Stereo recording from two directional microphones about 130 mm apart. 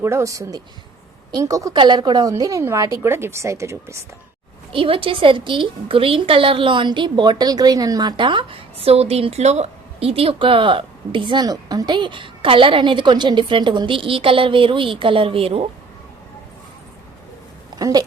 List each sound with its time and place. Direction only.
0.0 s a woman's voice: 20° right (ahead or behind)
4.7 s a woman's voice: 45° right (ahead or behind)
17.7 s a sound: 30° right (ahead or behind)